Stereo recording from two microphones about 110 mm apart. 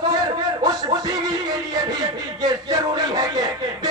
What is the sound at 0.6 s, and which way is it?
Music, 35° right (ahead or behind).